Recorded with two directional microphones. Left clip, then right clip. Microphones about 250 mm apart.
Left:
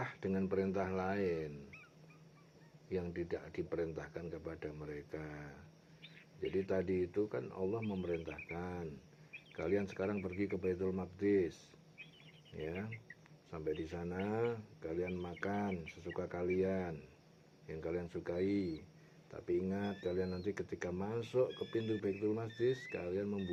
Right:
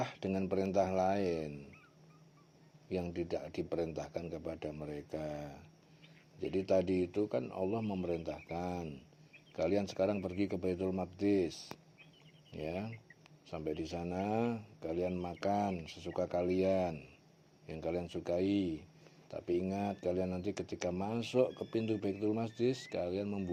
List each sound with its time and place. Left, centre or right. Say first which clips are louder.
0.1 s speech: right 2 dB; right
2.9 s speech: right 3 dB; right
12.6 s speech: right 3 dB; right
19.6 s speech: right 4 dB; right